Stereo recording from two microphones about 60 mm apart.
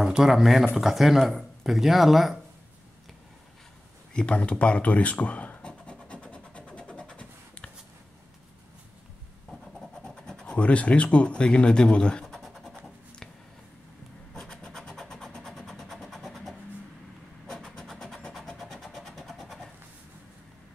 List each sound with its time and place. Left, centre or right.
0.2 s speech: centre
4.1 s writing: centre
9.5 s scratch: centre
12.4 s scratch: centre
14.3 s vehicle: centre
18.6 s vehicle: centre